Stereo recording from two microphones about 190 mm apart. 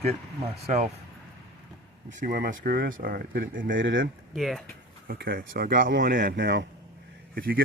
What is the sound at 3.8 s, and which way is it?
Speech, 80° right.